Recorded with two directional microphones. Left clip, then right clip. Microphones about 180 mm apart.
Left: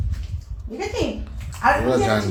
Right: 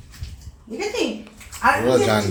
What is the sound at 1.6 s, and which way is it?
Speech, centre (ahead or behind).